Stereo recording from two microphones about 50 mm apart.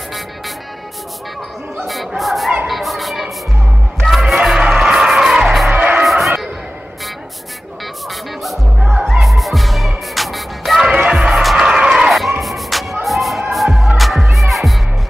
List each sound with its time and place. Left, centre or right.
1.9 s a sound: centre
2.7 s bow-wow: centre
4.1 s music: centre
4.6 s music: centre
5.7 s music: right
6.0 s basketball bounce: centre
8.5 s music: centre
11.1 s music: centre
12.1 s a sound: centre
13.5 s music: centre